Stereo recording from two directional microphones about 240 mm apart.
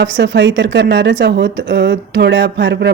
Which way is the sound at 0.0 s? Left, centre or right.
Right.